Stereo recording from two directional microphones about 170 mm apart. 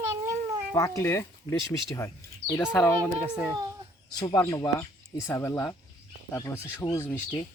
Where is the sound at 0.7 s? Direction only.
20° left (ahead or behind).